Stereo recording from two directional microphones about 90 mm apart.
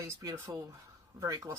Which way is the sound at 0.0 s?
35° right (ahead or behind).